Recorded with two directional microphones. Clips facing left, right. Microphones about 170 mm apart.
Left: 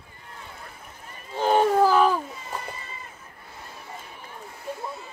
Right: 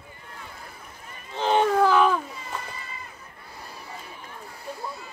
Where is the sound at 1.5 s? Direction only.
35° left (ahead or behind).